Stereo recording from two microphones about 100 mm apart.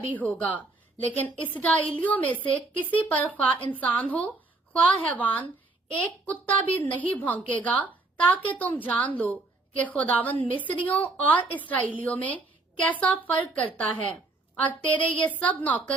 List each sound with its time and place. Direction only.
0.3 s a woman's voice: 15° left (ahead or behind)